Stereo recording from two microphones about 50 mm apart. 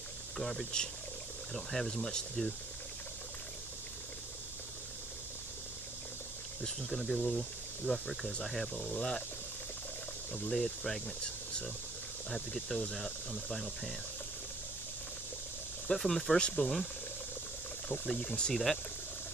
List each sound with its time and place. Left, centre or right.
0.4 s speech: centre
6.9 s speech: centre
7.2 s speech: centre
8.8 s speech: left
10.5 s speech: centre
12.3 s speech: centre
15.9 s speech: centre
16.3 s speech: left
18.0 s speech: left
18.5 s speech: centre